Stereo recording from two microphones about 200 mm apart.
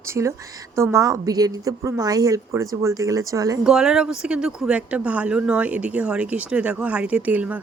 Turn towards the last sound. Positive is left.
turn(degrees=-10)  # may be behind; listen again after turning